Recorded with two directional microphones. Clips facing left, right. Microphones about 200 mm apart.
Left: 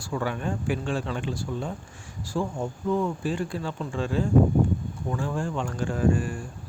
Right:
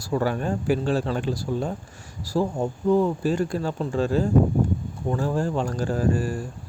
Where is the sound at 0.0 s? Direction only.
40° right (ahead or behind).